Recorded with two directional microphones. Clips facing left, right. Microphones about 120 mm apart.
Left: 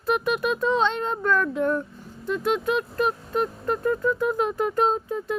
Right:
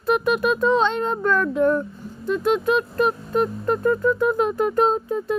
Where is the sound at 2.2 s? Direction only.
40° right (ahead or behind).